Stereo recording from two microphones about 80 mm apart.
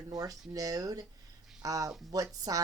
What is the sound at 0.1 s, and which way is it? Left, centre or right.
Speech, right.